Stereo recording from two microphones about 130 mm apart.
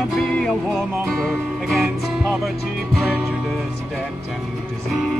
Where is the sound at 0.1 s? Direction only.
5° left (ahead or behind).